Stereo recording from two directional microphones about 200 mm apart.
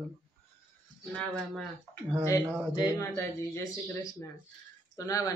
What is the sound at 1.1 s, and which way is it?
Speech, 5° left (ahead or behind).